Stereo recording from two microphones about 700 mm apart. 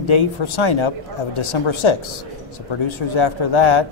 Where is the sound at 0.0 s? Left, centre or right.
Left.